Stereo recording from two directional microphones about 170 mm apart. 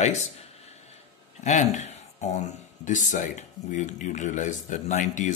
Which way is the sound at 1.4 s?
45° left (ahead or behind).